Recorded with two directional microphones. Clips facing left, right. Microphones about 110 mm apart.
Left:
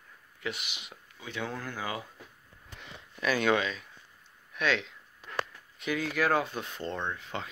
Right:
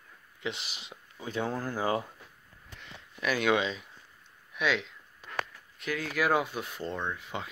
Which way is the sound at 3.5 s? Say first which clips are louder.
Right 1 dB; 20° right (ahead or behind).